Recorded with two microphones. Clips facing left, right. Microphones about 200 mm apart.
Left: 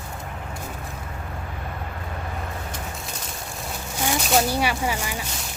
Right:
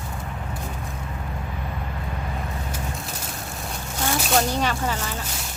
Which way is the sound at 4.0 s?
10° left (ahead or behind).